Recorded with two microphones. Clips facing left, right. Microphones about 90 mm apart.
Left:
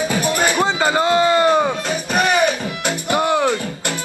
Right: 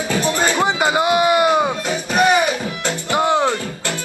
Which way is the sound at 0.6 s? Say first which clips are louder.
Even; 15° right (ahead or behind).